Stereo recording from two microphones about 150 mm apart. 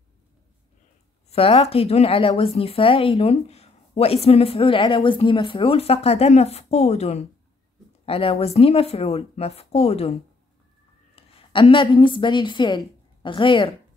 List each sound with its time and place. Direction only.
1.3 s speech: 40° left (ahead or behind)
11.1 s a woman's voice: 40° left (ahead or behind)